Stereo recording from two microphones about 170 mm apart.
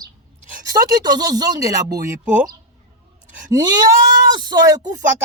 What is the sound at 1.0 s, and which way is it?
Speech, 25° right (ahead or behind).